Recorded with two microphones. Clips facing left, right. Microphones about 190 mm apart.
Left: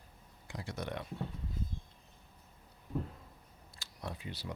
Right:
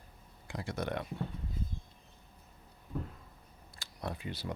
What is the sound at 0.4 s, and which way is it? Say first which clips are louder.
Speech: right 4 dB; 60° right (ahead or behind).